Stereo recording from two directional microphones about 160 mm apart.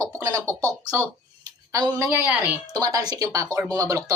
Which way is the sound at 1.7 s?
25° right (ahead or behind).